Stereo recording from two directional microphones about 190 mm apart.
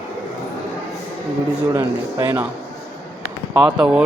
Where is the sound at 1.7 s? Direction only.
15° right (ahead or behind).